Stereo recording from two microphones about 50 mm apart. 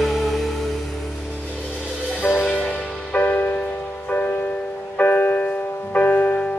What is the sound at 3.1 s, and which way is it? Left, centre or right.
Music, left.